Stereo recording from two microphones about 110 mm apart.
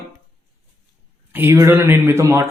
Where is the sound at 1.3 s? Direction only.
25° right (ahead or behind).